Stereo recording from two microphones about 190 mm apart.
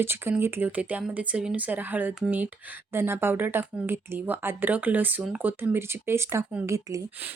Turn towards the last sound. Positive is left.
turn(degrees=-15)  # may be behind; listen again after turning